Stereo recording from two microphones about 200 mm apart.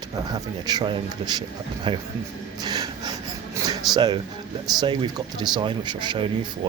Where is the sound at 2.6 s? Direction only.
20° right (ahead or behind).